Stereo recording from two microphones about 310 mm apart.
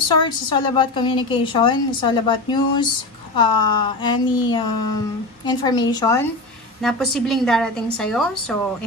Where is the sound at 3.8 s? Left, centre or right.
Centre.